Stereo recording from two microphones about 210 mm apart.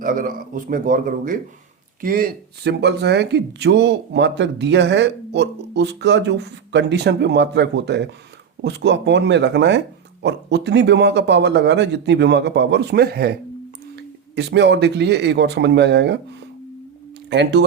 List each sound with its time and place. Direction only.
0.0 s a man's voice: 40° right (ahead or behind)
17.2 s speech: 55° right (ahead or behind)